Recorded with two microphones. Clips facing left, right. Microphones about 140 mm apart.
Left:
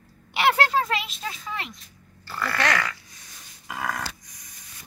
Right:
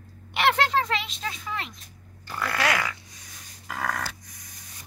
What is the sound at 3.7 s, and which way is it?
Dog, 5° left (ahead or behind).